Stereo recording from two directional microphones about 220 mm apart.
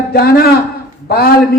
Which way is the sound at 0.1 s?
45° left (ahead or behind).